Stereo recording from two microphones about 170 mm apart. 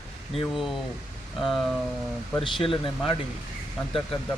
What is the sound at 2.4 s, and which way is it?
Speech, 30° left (ahead or behind).